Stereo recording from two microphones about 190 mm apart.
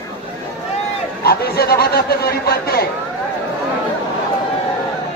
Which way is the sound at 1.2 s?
55° left (ahead or behind).